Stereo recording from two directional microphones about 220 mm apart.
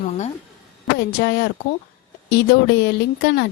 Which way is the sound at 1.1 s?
45° left (ahead or behind).